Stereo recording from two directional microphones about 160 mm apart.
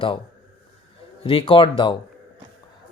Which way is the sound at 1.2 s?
35° left (ahead or behind).